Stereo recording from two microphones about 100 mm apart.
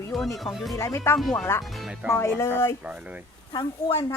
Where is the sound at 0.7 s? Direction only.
30° left (ahead or behind).